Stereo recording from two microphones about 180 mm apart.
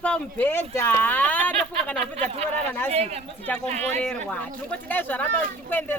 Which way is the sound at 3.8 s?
10° left (ahead or behind).